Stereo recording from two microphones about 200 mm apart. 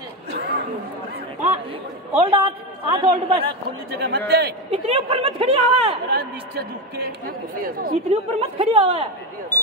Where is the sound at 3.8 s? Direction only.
55° right (ahead or behind).